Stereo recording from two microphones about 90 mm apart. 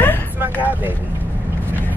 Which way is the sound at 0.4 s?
20° right (ahead or behind).